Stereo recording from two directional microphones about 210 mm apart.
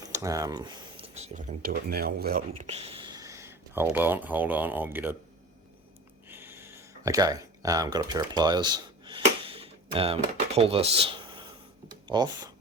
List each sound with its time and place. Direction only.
0.0 s speech: 15° right (ahead or behind)
6.2 s a sound: 10° right (ahead or behind); by 11.1 s 25° right (ahead or behind)
12.0 s speech: 20° right (ahead or behind)